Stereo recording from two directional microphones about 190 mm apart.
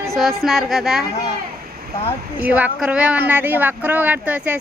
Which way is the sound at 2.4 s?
10° right (ahead or behind).